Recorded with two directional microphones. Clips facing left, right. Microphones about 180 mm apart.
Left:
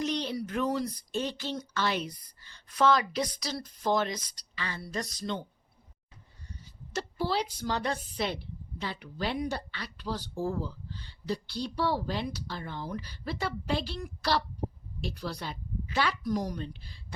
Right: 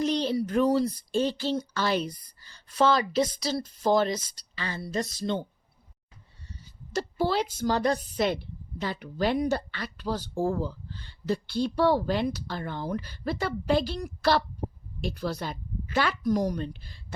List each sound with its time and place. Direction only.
0.0 s speech: 30° right (ahead or behind)
6.9 s speech: 50° right (ahead or behind)